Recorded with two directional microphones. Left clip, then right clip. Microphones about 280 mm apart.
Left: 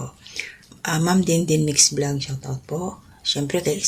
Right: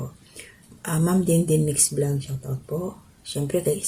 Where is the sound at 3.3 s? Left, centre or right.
Centre.